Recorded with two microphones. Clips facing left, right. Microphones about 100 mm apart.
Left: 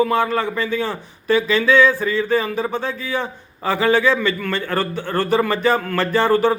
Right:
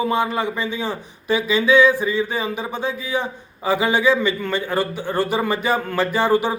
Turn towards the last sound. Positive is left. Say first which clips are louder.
# left 2 dB
turn(degrees=-15)  # may be behind; listen again after turning